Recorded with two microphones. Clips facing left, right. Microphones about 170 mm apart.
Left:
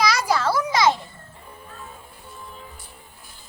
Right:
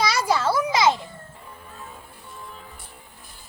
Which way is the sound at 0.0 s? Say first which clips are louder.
Left 1 dB; 25° right (ahead or behind).